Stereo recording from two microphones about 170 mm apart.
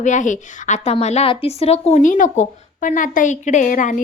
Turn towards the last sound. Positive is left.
turn(degrees=50)  # may be behind; listen again after turning